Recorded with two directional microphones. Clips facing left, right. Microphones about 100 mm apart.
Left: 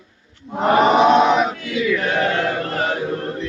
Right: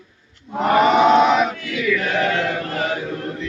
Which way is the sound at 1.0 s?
20° left (ahead or behind).